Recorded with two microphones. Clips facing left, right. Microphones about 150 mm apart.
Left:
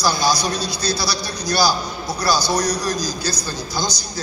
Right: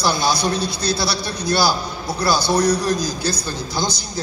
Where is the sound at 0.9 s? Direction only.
25° right (ahead or behind).